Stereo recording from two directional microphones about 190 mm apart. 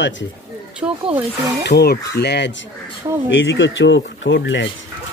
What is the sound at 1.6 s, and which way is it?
Speech, 60° left (ahead or behind).